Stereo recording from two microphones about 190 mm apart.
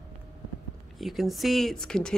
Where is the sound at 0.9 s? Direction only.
Centre (ahead or behind).